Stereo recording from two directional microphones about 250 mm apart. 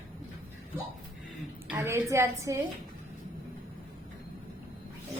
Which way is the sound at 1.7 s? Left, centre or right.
Centre.